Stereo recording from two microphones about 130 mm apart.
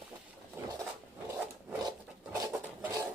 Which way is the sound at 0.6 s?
20° right (ahead or behind).